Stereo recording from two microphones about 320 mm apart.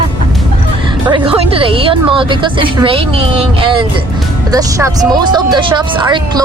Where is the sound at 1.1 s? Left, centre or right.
Centre.